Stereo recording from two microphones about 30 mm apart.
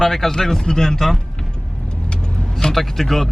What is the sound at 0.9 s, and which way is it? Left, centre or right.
Speech, centre.